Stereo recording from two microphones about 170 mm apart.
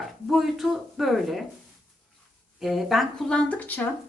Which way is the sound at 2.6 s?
Centre (ahead or behind).